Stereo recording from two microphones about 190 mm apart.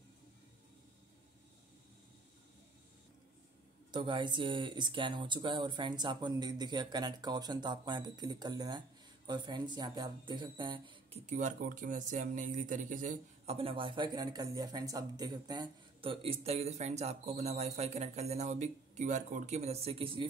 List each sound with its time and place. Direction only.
3.9 s speech: 25° right (ahead or behind)
11.2 s speech: 40° right (ahead or behind)